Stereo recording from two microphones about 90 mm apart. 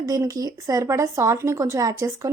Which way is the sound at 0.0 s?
40° right (ahead or behind).